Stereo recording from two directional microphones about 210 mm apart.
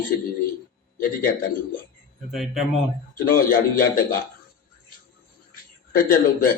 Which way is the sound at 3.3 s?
45° left (ahead or behind).